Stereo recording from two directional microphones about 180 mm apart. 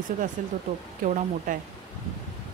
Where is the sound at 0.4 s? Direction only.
45° right (ahead or behind).